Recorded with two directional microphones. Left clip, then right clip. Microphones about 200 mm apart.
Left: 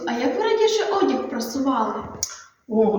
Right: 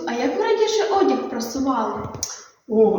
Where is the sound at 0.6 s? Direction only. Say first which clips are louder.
Right 2 dB; 10° left (ahead or behind).